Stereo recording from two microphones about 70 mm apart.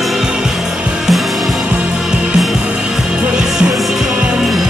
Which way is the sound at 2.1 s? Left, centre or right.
Centre.